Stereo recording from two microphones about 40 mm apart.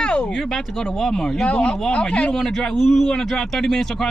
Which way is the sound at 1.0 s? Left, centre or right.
Centre.